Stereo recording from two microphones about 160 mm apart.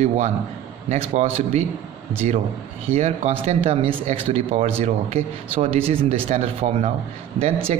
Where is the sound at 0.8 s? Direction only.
40° right (ahead or behind).